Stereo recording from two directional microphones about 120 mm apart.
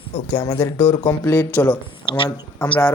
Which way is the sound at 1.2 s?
20° left (ahead or behind).